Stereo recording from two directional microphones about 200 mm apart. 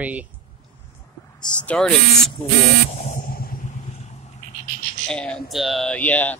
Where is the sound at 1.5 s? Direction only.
5° left (ahead or behind).